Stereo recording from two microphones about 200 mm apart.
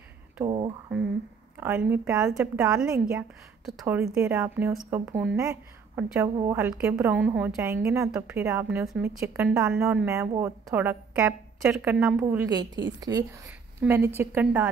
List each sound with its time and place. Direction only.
1.6 s speech: 10° right (ahead or behind)
6.7 s speech: 5° right (ahead or behind)
12.4 s speech: 20° right (ahead or behind)